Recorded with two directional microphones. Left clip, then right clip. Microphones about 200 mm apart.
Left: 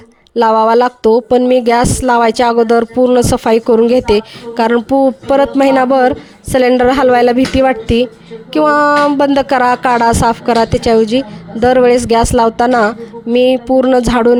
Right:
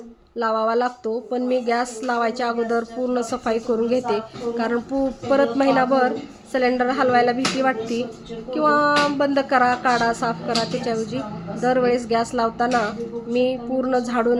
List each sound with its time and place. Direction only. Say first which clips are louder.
0.3 s speech: left 12 dB; 55° left (ahead or behind)